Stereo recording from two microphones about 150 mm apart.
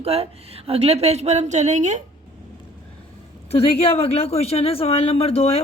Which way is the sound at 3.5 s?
40° left (ahead or behind).